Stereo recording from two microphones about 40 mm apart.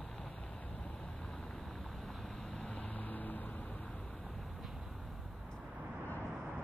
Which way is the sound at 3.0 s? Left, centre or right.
Left.